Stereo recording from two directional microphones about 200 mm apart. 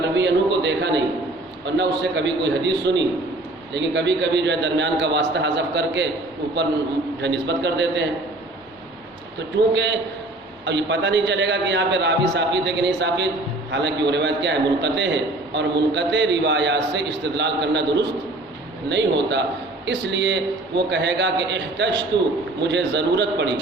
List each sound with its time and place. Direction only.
0.2 s a man's voice: 60° right (ahead or behind)
7.2 s a man's voice: 60° right (ahead or behind)
9.7 s a man's voice: 60° right (ahead or behind)